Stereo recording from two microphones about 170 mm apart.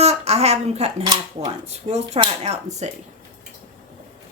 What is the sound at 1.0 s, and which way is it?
Speech, 25° right (ahead or behind).